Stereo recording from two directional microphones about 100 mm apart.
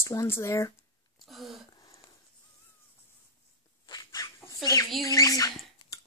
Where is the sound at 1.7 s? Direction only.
40° left (ahead or behind).